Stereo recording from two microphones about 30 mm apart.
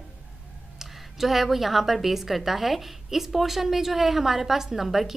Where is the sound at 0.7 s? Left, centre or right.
Centre.